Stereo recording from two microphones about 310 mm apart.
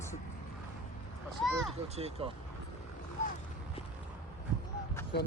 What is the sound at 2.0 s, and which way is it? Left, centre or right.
Speech, centre.